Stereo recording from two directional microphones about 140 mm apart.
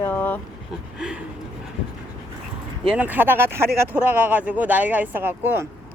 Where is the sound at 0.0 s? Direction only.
10° left (ahead or behind).